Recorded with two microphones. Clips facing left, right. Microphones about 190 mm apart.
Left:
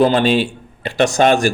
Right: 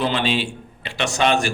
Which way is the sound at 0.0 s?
45° left (ahead or behind).